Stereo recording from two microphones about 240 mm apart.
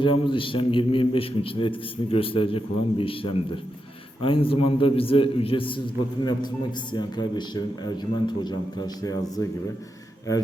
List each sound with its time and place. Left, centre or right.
0.0 s a man's voice: left